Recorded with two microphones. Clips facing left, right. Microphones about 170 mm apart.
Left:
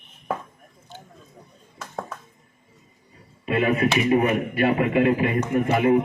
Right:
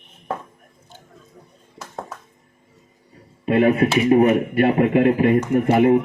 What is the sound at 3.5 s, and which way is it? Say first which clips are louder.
Speech: right 6 dB; 55° right (ahead or behind).